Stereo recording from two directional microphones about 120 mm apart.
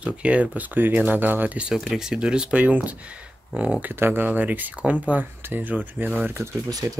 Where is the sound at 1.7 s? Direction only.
Centre (ahead or behind); by 6.5 s 15° right (ahead or behind).